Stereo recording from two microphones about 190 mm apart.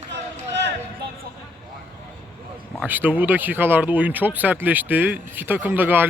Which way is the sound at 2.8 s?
10° right (ahead or behind).